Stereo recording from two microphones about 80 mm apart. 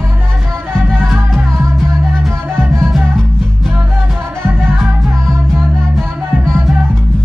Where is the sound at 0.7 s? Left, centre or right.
Centre.